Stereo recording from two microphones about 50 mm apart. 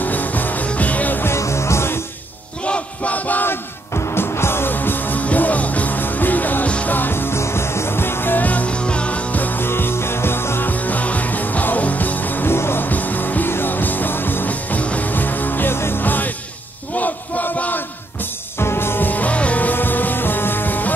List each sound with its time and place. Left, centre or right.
0.0 s music: left
1.2 s music: left
2.6 s battle cry: left
3.4 s music: left
4.7 s music: left
8.5 s music: left
9.7 s music: left
10.7 s music: left
12.5 s music: left
12.8 s music: left
16.9 s battle cry: left
18.6 s music: left